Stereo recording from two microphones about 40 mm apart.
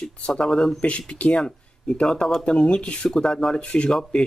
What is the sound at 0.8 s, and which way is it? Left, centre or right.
Speech, left.